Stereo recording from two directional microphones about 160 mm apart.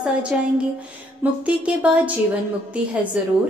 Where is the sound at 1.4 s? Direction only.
10° right (ahead or behind).